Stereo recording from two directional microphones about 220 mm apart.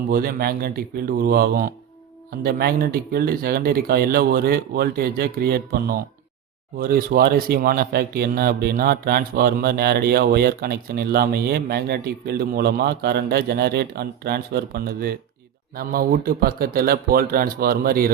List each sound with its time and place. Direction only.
0.1 s speech: 45° right (ahead or behind)